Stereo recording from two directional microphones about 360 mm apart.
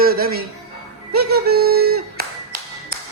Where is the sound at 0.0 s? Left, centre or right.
Right.